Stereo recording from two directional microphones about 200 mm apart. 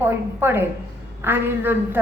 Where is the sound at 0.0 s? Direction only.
10° right (ahead or behind).